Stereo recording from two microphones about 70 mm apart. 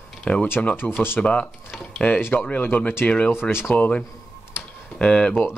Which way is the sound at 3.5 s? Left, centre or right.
Left.